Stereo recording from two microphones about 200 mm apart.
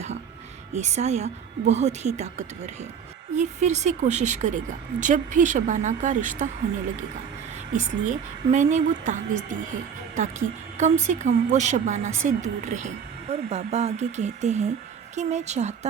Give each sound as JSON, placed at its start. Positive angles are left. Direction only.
{"t": 0.7, "sound": "a woman's voice", "side_deg": -35}
{"t": 7.7, "sound": "a woman's voice", "side_deg": -35}
{"t": 10.8, "sound": "a woman's voice", "side_deg": -35}